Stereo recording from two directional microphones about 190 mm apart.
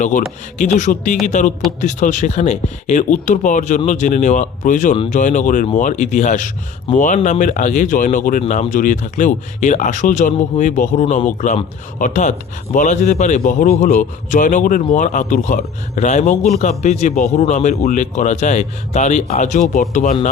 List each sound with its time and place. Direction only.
0.0 s a man's voice: 40° left (ahead or behind)